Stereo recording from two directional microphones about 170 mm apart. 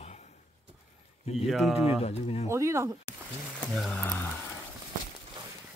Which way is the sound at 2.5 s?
15° right (ahead or behind).